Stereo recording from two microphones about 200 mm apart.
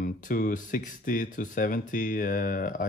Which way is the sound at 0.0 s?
40° left (ahead or behind).